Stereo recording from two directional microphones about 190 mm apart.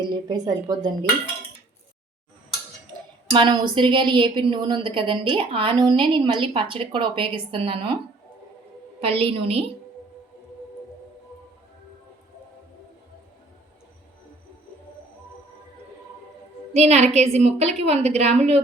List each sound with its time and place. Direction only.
0.0 s a woman's voice: 25° right (ahead or behind)
3.3 s a woman's voice: 25° right (ahead or behind)
9.0 s a woman's voice: 30° right (ahead or behind)
16.7 s a woman's voice: 35° right (ahead or behind)